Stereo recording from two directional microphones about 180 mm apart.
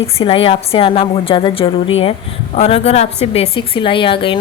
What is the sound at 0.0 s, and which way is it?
A woman's voice, 30° left (ahead or behind).